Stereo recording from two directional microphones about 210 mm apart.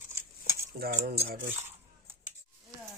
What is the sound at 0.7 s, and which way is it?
Speech, 45° right (ahead or behind).